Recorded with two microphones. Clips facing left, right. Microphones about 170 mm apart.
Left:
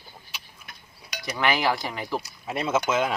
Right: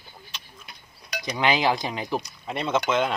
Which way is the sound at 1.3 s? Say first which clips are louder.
Right 2 dB; 20° right (ahead or behind).